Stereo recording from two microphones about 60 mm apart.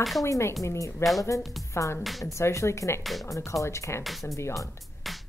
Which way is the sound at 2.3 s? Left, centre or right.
Left.